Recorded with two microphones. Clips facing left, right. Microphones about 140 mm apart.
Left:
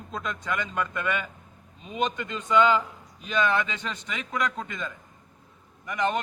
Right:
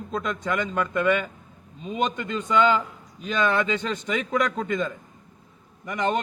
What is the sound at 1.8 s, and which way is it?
Speech, 35° right (ahead or behind).